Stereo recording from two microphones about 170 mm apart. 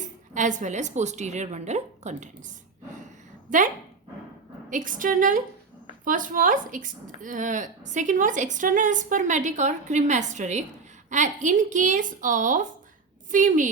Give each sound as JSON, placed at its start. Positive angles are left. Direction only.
{"t": 0.0, "sound": "a woman's voice", "side_deg": -45}
{"t": 4.7, "sound": "a woman's voice", "side_deg": -50}